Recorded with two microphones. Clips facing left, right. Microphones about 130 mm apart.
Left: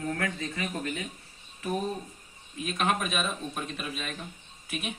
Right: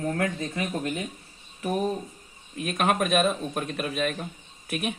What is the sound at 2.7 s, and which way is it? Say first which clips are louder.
Speech: right 6 dB; 55° right (ahead or behind).